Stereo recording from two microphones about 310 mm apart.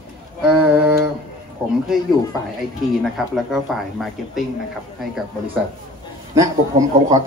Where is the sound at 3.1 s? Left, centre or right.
Centre.